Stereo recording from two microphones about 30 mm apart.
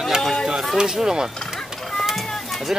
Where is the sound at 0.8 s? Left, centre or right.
Centre.